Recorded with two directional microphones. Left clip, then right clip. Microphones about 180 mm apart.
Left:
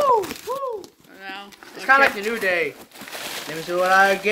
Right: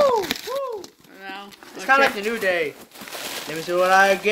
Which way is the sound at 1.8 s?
20° right (ahead or behind).